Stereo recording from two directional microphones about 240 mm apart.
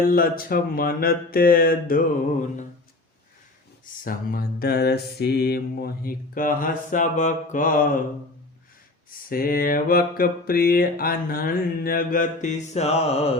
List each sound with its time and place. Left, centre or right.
0.1 s mantra: left
4.0 s mantra: left
9.0 s mantra: left